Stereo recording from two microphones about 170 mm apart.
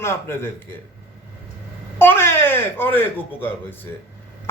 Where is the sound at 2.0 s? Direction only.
15° left (ahead or behind).